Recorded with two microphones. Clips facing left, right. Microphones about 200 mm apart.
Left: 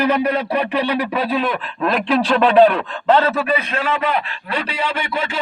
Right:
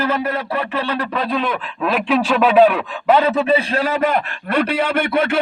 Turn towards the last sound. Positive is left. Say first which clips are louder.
# right 6 dB
turn(degrees=-55)  # may be behind; listen again after turning